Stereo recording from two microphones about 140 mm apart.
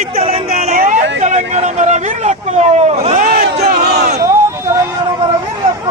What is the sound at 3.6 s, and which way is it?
Crowd, 90° right.